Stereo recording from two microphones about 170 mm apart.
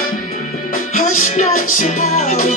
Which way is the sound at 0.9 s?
45° left (ahead or behind).